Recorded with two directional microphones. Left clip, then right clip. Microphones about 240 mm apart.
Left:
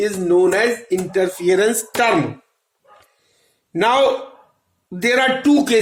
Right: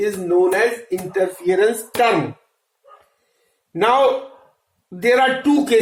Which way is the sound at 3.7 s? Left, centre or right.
Left.